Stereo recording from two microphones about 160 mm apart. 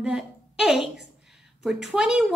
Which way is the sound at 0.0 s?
5° right (ahead or behind).